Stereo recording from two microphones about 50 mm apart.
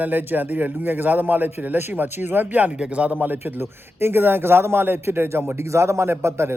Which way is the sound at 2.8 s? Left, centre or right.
Right.